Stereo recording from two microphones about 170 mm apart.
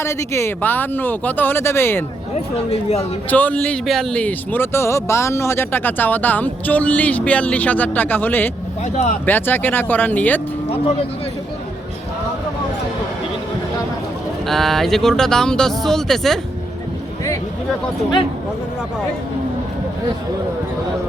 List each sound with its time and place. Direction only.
0.0 s speech: 15° left (ahead or behind)
2.3 s speech: 40° left (ahead or behind)
3.2 s speech: 10° left (ahead or behind)
14.4 s speech: centre (ahead or behind)